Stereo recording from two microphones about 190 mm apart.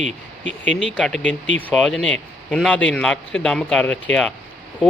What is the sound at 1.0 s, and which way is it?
Speech, 5° left (ahead or behind).